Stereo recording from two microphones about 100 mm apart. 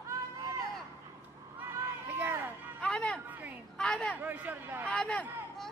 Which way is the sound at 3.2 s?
20° right (ahead or behind).